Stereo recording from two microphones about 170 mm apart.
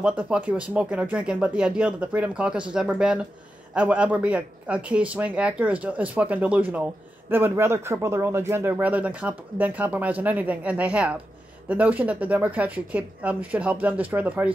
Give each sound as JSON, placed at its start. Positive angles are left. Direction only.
{"t": 0.0, "sound": "speech", "side_deg": -10}